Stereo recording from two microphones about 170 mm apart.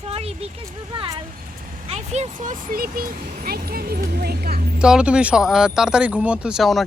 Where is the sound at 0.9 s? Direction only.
25° right (ahead or behind).